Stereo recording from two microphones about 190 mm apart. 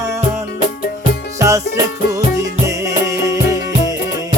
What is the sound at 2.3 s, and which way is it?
Music, 15° right (ahead or behind).